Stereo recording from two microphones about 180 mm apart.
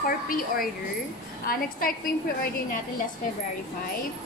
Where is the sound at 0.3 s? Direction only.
50° left (ahead or behind).